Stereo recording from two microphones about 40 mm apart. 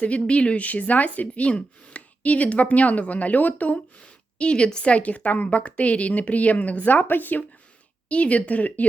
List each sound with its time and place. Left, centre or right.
0.3 s speech: left
4.0 s speech: left
8.1 s speech: left